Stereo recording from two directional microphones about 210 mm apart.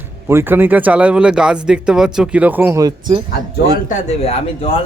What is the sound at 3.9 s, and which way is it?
Speech, 30° left (ahead or behind).